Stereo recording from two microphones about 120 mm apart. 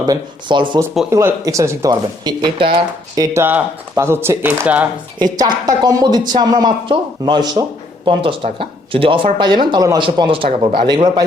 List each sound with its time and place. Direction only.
0.0 s speech: 40° right (ahead or behind)
1.1 s speech: 25° right (ahead or behind)
1.9 s speech: 40° right (ahead or behind)
3.2 s speech: 20° right (ahead or behind)
5.2 s speech: 35° right (ahead or behind)
10.0 s speech: 45° right (ahead or behind)